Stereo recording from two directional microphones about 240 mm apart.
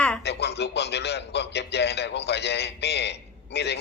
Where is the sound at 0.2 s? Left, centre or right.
Left.